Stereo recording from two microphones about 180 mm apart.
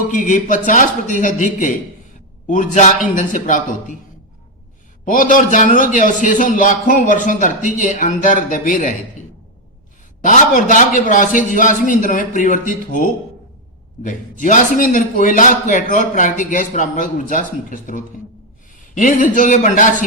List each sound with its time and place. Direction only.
0.1 s a man's voice: 45° left (ahead or behind)
5.0 s a man's voice: 45° left (ahead or behind)
10.2 s a man's voice: 45° left (ahead or behind)